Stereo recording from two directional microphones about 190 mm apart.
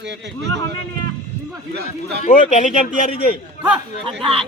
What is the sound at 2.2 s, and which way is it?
Speech, 40° left (ahead or behind).